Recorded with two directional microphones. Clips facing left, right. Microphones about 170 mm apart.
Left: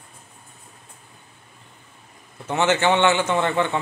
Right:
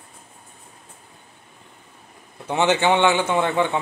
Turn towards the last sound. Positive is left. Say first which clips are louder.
# right 1 dB
turn(degrees=-10)  # may be behind; listen again after turning